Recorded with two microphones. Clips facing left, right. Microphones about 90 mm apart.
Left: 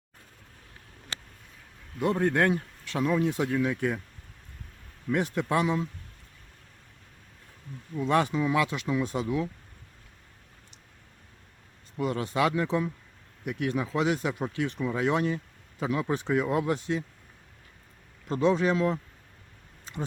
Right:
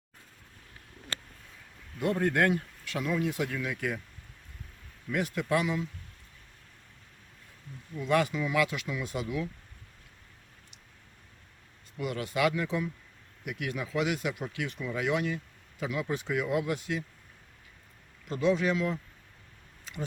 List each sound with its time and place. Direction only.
2.0 s speech: 25° left (ahead or behind)
5.1 s speech: 30° left (ahead or behind)
7.9 s speech: 30° left (ahead or behind)
11.9 s speech: 30° left (ahead or behind)
18.3 s speech: 35° left (ahead or behind)
19.8 s a sound: 30° left (ahead or behind)